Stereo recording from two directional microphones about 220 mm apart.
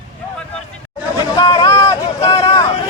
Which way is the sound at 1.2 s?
20° left (ahead or behind).